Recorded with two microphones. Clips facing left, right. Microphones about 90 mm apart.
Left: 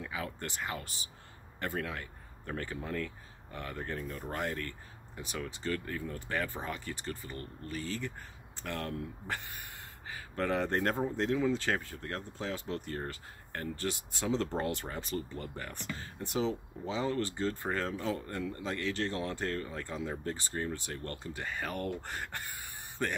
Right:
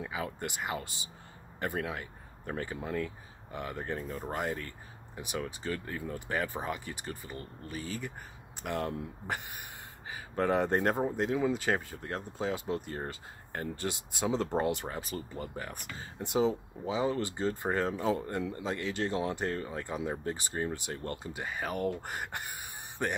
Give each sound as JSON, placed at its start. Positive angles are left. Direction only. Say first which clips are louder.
{"t": 0.0, "sound": "speech", "louder": "right 3 dB", "side_deg": -15}